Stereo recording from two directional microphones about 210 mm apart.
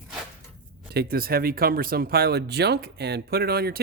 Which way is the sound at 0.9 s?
45° right (ahead or behind).